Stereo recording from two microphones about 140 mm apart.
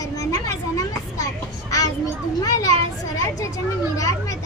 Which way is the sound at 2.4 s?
25° left (ahead or behind).